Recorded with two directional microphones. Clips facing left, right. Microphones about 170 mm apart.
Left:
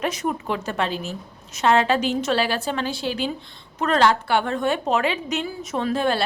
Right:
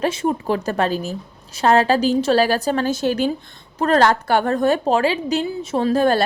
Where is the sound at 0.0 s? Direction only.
30° right (ahead or behind).